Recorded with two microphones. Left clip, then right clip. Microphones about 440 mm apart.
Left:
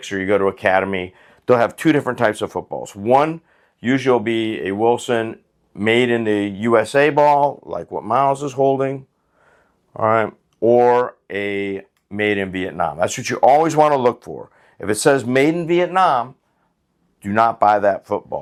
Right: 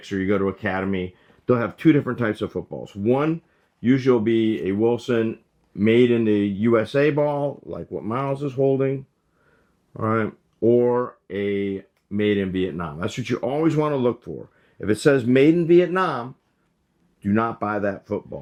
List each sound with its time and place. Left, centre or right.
0.1 s speech: left